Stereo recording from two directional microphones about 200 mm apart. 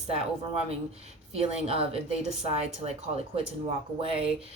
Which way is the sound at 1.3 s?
30° right (ahead or behind).